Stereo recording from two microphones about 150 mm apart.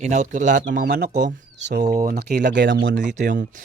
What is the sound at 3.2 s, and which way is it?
Speech, 65° right (ahead or behind).